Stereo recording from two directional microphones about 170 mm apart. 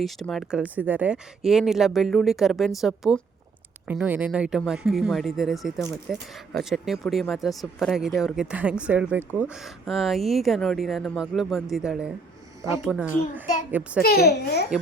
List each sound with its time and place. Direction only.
0.0 s speech: centre (ahead or behind)
14.0 s a child's voice: 65° left (ahead or behind)